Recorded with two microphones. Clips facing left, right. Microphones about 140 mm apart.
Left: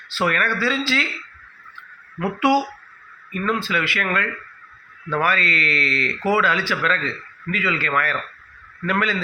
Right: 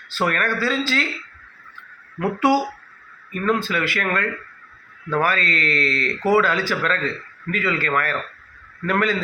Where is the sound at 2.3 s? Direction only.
40° right (ahead or behind).